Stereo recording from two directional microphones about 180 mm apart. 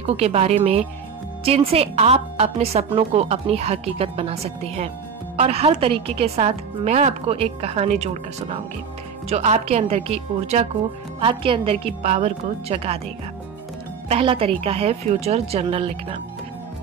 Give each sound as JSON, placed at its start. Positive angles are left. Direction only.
{"t": 0.0, "sound": "a woman's voice", "side_deg": -35}
{"t": 14.0, "sound": "a woman's voice", "side_deg": -30}